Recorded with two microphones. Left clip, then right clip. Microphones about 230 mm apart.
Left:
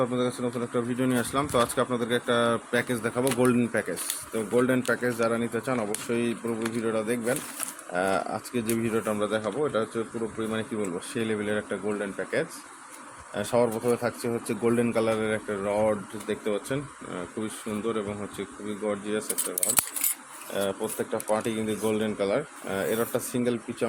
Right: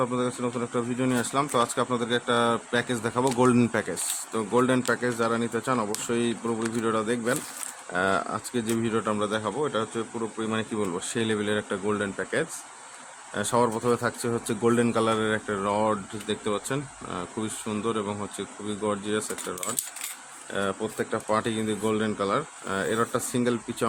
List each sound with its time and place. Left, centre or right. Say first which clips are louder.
0.0 s speech: even; centre
11.1 s speech: right 1 dB; centre
20.5 s speech: even; centre